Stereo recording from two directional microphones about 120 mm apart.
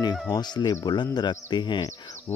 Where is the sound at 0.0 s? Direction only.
35° left (ahead or behind).